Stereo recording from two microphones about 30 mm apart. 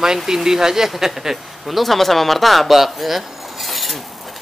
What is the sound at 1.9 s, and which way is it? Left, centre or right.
Speech, centre.